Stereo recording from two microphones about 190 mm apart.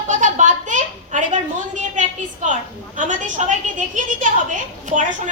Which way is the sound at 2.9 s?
40° right (ahead or behind).